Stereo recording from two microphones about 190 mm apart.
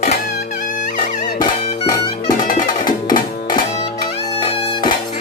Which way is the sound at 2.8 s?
20° left (ahead or behind).